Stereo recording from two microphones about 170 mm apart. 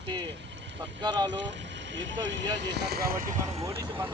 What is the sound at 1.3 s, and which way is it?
Speech, 90° right.